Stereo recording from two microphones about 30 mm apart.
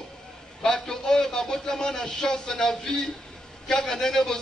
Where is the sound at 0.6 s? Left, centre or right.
Centre.